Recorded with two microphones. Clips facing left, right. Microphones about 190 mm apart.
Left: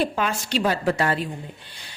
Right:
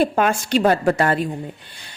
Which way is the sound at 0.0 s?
50° right (ahead or behind).